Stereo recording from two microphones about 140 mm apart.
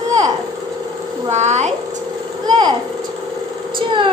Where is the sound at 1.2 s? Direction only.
55° right (ahead or behind).